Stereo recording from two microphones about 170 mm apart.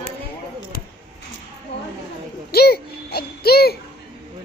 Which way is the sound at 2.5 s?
65° left (ahead or behind).